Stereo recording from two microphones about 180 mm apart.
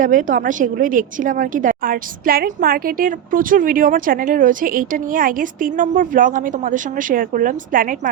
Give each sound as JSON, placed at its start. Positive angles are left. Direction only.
{"t": 0.0, "sound": "a woman's voice", "side_deg": -45}